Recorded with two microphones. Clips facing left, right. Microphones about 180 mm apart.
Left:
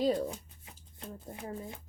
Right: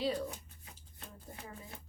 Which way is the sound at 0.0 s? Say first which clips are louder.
Left 6 dB; 45° left (ahead or behind).